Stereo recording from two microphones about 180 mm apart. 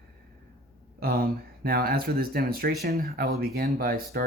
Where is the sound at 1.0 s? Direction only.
60° right (ahead or behind).